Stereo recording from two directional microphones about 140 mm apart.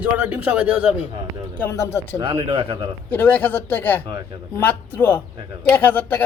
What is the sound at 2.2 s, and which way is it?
Speech, 40° right (ahead or behind).